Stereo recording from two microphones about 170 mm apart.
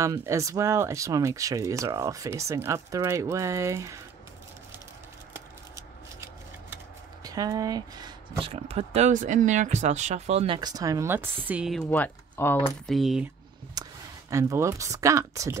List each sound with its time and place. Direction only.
0.0 s speech: 15° right (ahead or behind)
5.3 s shuffling cards: 15° right (ahead or behind)
7.2 s speech: 20° right (ahead or behind)
8.5 s speech: 35° right (ahead or behind); by 11.8 s 5° right (ahead or behind)
11.9 s speech: 10° left (ahead or behind)
12.8 s speech: centre (ahead or behind)
13.8 s a sound: 25° right (ahead or behind)
14.3 s speech: 15° right (ahead or behind)